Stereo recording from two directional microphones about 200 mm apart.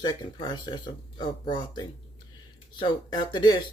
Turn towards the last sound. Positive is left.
turn(degrees=20)  # may be behind; listen again after turning